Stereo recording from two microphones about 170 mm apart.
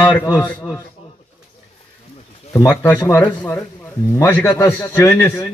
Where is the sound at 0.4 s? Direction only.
10° left (ahead or behind).